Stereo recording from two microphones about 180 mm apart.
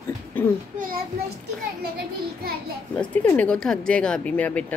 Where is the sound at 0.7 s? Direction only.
50° right (ahead or behind).